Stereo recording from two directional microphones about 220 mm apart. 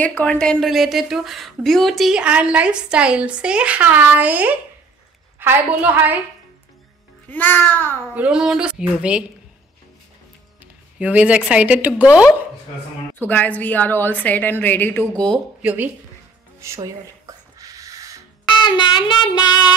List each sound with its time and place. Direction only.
0.0 s a woman's voice: 5° left (ahead or behind)
7.2 s a woman's voice: 10° left (ahead or behind)
8.1 s a woman's voice: 5° right (ahead or behind)
11.0 s speech: 5° right (ahead or behind)
13.1 s a woman's voice: 10° left (ahead or behind)
16.5 s a sound: 15° right (ahead or behind)
18.7 s child singing: 20° left (ahead or behind)